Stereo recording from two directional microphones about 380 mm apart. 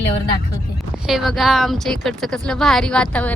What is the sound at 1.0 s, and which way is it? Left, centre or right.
Speech, centre.